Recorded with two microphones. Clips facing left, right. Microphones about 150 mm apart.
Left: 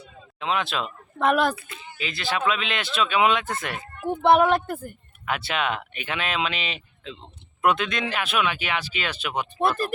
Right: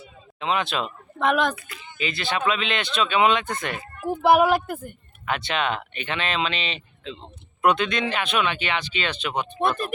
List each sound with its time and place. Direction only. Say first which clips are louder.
0.3 s speech: right 1 dB; centre (ahead or behind)
1.5 s speech: left 1 dB; 25° left (ahead or behind)
2.0 s speech: right 1 dB; centre (ahead or behind)